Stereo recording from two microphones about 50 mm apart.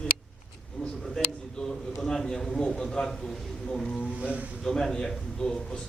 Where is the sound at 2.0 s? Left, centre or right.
Centre.